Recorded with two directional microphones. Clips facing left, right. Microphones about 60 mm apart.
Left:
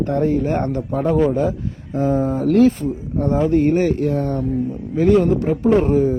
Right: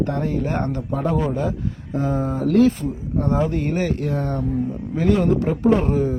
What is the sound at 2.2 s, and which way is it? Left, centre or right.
Speech, left.